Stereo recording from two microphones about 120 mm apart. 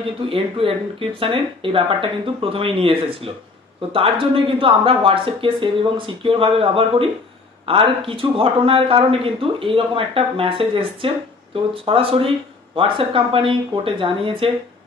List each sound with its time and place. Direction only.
0.3 s speech: 50° right (ahead or behind)